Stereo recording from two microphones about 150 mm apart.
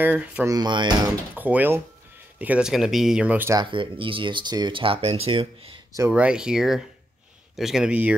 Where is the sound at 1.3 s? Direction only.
10° right (ahead or behind).